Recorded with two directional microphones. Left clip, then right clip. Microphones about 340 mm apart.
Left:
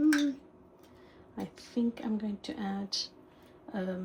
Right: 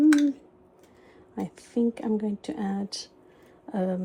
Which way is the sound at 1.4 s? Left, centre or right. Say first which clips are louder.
Right 7 dB; right.